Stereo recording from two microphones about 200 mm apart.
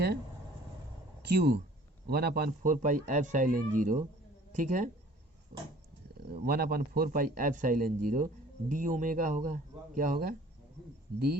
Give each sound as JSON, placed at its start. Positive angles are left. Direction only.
{"t": 1.2, "sound": "a man's voice", "side_deg": -55}
{"t": 6.4, "sound": "a man's voice", "side_deg": -50}